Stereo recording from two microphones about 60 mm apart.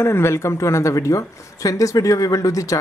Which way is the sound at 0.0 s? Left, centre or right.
Left.